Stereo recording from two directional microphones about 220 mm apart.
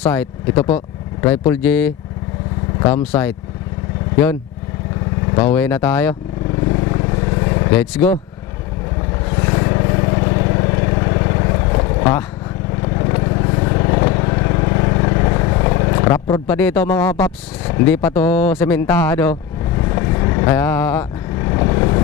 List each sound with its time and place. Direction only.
0.0 s speech: 10° left (ahead or behind)
2.9 s speech: 15° left (ahead or behind)
5.4 s speech: 15° left (ahead or behind)
6.7 s vehicle: 20° left (ahead or behind)
9.4 s vehicle: 20° left (ahead or behind)